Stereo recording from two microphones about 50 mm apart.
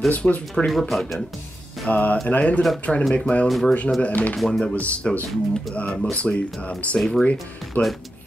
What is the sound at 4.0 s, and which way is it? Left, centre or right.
Speech, left.